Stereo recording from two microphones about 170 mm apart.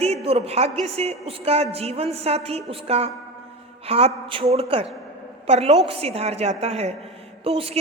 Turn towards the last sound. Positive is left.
turn(degrees=-35)  # may be behind; listen again after turning